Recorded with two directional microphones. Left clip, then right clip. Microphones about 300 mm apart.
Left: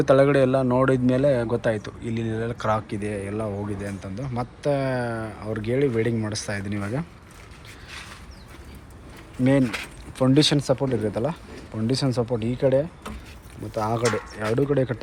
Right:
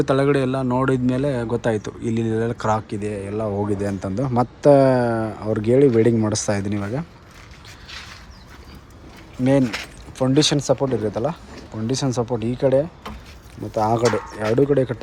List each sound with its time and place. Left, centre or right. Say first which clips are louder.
0.0 s speech: left 1 dB; centre
4.0 s speech: right 10 dB; right
5.4 s speech: right 7 dB; centre
5.6 s speech: right 8 dB; centre
6.6 s speech: right 4 dB; centre
9.4 s speech: right 3 dB; centre
10.9 s speech: right 3 dB; centre
12.2 s speech: right 3 dB; centre
13.7 s speech: right 5 dB; centre